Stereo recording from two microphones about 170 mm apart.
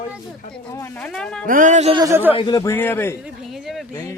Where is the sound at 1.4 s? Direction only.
50° right (ahead or behind).